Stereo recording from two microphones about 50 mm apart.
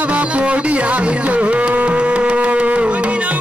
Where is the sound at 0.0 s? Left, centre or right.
Right.